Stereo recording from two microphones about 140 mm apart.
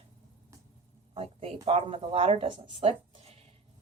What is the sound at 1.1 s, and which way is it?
Speech, 45° right (ahead or behind).